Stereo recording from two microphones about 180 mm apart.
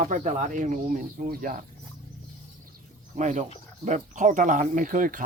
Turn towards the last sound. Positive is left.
turn(degrees=-45)  # may be behind; listen again after turning